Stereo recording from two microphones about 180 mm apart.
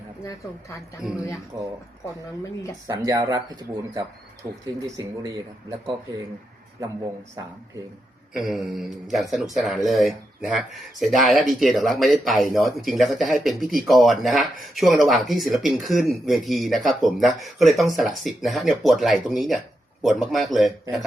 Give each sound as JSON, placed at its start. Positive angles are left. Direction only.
{"t": 1.0, "sound": "speech", "side_deg": -5}
{"t": 1.5, "sound": "speech", "side_deg": -20}
{"t": 2.8, "sound": "speech", "side_deg": -20}
{"t": 8.3, "sound": "speech", "side_deg": 0}